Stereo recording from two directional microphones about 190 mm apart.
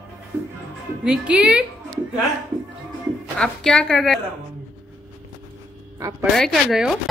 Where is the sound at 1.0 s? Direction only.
5° right (ahead or behind).